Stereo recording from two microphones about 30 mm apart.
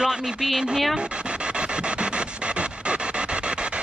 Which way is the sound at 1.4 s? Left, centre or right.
Right.